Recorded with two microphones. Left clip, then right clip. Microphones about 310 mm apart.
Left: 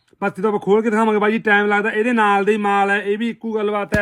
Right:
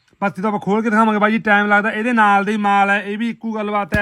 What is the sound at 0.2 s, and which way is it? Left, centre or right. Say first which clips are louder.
A man's voice: even; right.